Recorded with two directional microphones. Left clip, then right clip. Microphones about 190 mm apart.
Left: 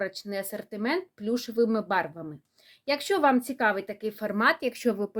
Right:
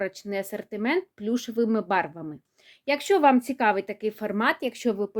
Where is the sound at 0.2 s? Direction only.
35° right (ahead or behind).